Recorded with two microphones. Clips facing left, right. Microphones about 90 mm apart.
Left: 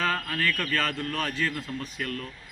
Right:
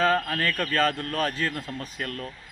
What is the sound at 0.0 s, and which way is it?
A man's voice, 35° right (ahead or behind).